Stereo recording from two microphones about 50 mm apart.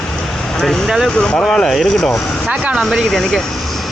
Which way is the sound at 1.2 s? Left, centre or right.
Left.